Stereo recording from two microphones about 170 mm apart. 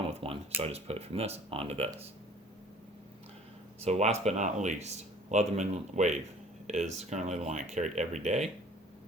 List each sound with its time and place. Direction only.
0.1 s a sound: 35° right (ahead or behind)
0.6 s speech: 35° right (ahead or behind)
3.8 s speech: 40° right (ahead or behind)